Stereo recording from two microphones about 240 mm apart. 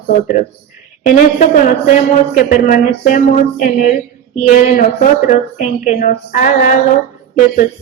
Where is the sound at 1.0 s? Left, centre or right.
Left.